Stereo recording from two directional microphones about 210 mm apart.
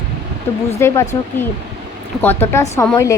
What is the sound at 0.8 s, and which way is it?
Speech, 10° left (ahead or behind).